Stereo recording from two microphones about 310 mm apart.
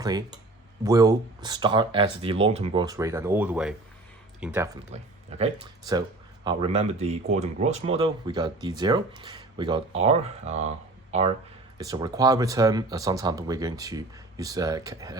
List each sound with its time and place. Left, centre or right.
0.0 s speech: centre